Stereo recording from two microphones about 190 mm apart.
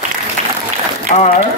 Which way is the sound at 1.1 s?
40° left (ahead or behind).